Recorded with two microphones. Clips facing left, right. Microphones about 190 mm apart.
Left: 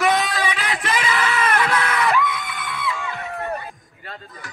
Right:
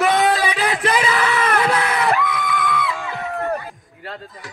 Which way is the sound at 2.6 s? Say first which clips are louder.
Right 5 dB; 40° right (ahead or behind).